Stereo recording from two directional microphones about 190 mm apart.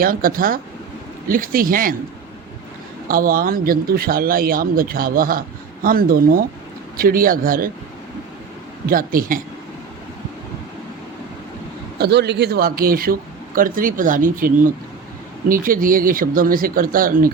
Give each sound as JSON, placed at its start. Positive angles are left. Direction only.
{"t": 0.0, "sound": "speech", "side_deg": -50}
{"t": 3.1, "sound": "speech", "side_deg": -50}
{"t": 8.9, "sound": "speech", "side_deg": -50}
{"t": 11.9, "sound": "speech", "side_deg": -60}